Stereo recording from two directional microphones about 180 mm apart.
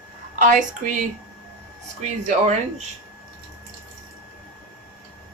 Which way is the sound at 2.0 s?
40° right (ahead or behind).